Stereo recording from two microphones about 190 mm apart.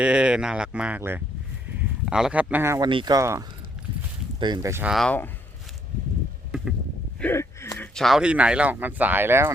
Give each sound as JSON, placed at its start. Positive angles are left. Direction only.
{"t": 0.0, "sound": "speech", "side_deg": -5}
{"t": 4.9, "sound": "speech", "side_deg": 5}
{"t": 7.2, "sound": "a sound", "side_deg": 10}
{"t": 7.9, "sound": "speech", "side_deg": 0}